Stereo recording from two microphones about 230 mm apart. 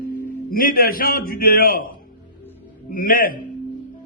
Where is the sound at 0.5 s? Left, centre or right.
Left.